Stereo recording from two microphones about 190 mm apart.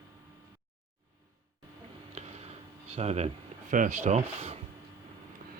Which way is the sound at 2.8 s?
35° right (ahead or behind).